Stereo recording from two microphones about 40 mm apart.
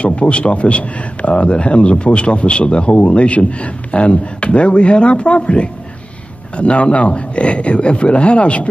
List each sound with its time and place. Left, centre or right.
0.0 s a man's voice: left